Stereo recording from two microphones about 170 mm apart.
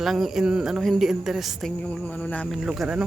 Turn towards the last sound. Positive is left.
turn(degrees=-5)  # may be behind; listen again after turning